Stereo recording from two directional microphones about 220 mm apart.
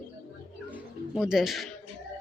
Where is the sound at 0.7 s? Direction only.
5° right (ahead or behind).